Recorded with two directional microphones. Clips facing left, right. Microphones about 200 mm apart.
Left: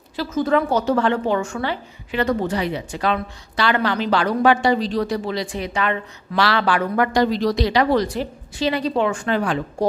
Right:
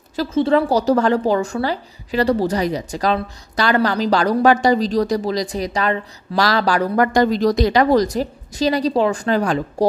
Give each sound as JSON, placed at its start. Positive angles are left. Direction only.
{"t": 0.3, "sound": "a woman's voice", "side_deg": -30}